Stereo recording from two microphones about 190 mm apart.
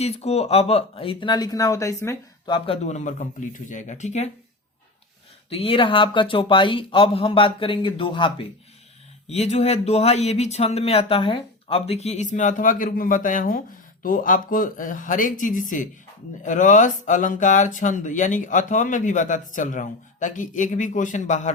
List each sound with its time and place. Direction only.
0.0 s speech: 35° left (ahead or behind); by 2.6 s 15° left (ahead or behind)
2.6 s speech: 35° left (ahead or behind)
5.5 s speech: 30° left (ahead or behind)